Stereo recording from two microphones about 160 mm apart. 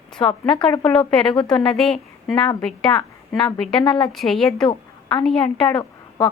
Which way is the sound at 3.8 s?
30° left (ahead or behind).